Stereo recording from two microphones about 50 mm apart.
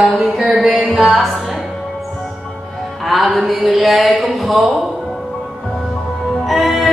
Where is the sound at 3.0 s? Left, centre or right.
Centre.